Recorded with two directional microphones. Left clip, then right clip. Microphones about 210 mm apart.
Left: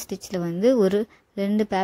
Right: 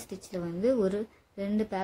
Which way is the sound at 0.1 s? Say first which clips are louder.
Left 7 dB; 40° left (ahead or behind).